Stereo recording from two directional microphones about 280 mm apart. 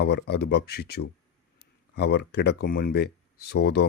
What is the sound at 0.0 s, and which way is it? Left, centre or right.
Speech, left.